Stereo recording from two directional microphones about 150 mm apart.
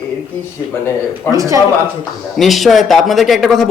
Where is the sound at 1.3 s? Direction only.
20° right (ahead or behind).